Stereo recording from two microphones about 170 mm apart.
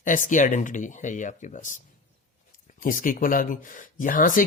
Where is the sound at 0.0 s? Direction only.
50° left (ahead or behind).